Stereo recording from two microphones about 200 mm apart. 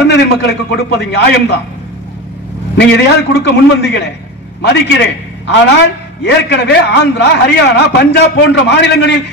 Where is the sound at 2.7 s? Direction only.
60° left (ahead or behind).